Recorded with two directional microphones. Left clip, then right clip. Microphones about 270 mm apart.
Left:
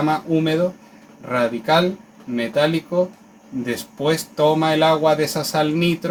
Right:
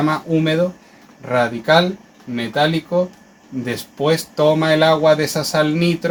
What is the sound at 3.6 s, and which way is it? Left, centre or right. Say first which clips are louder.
Speech: right 2 dB; right.